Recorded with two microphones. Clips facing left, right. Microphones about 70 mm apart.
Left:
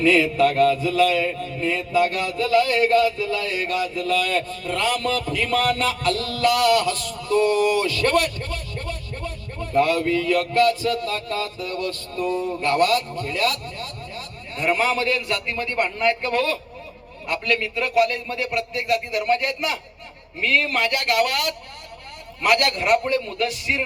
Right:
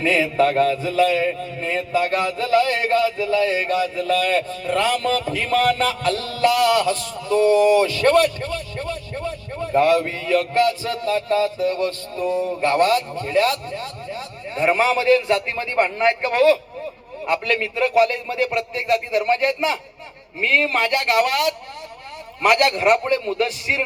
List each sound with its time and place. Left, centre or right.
0.0 s a man's voice: right
8.5 s vehicle: right
9.1 s a sound: right
10.8 s a man's voice: right
22.5 s a man's voice: right